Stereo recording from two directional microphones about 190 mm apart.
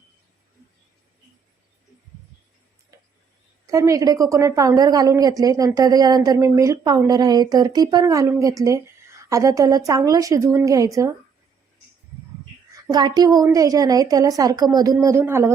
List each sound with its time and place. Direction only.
3.7 s a woman's voice: 15° right (ahead or behind)
12.7 s a woman's voice: 20° right (ahead or behind)